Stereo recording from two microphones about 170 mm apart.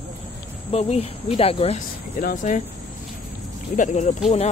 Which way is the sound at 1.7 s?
50° left (ahead or behind).